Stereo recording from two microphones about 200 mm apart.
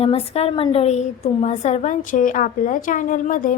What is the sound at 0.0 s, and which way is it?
A woman's voice, 30° left (ahead or behind).